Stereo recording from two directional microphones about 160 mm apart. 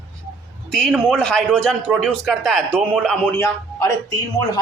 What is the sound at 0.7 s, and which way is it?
A man's voice, 5° left (ahead or behind).